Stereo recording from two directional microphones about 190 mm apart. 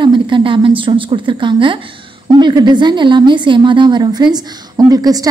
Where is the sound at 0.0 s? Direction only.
25° right (ahead or behind).